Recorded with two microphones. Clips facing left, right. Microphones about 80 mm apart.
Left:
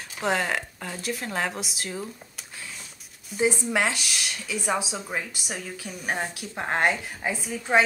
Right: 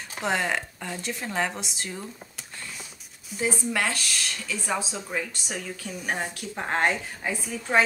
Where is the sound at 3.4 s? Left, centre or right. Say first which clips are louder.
Left 3 dB; centre.